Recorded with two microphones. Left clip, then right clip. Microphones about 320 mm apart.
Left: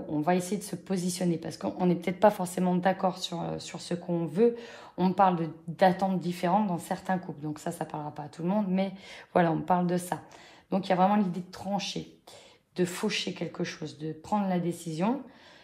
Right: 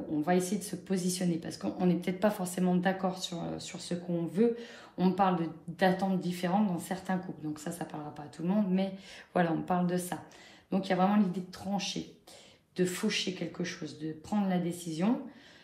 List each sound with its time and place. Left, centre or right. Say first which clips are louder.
0.2 s speech: left 2 dB; left